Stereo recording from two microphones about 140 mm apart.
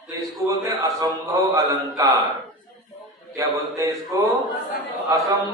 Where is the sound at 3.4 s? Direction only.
25° right (ahead or behind).